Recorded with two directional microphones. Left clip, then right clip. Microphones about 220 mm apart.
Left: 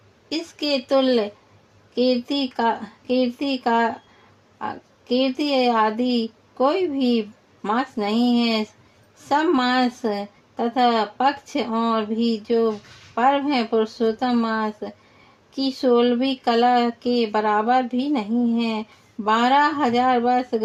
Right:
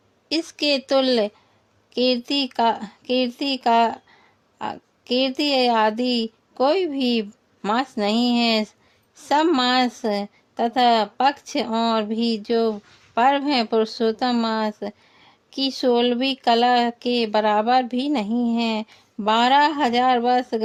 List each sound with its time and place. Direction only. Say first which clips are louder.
0.3 s speech: right 3 dB; 50° right (ahead or behind)